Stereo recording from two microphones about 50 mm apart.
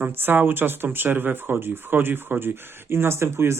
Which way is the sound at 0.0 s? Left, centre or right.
Right.